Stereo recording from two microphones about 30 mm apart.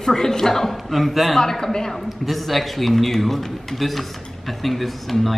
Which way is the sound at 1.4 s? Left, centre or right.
Centre.